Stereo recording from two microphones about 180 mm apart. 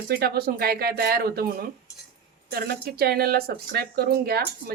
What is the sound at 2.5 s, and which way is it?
Speech, 60° right (ahead or behind).